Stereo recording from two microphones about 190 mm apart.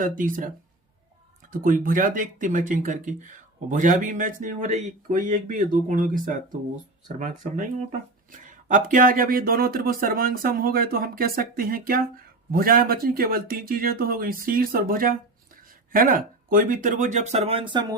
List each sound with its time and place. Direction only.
0.0 s speech: 45° right (ahead or behind)
1.6 s speech: 45° right (ahead or behind); by 17.8 s 25° right (ahead or behind)